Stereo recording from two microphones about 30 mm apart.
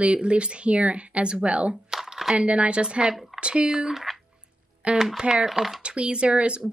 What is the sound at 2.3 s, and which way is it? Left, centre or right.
Speech, right.